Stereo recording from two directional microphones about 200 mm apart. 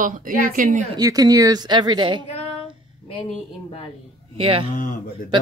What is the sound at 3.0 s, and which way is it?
Speech, 25° left (ahead or behind).